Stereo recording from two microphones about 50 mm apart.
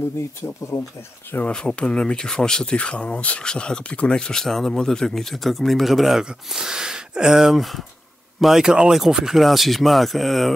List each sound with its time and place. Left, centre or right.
0.4 s speech: left
1.5 s speech: centre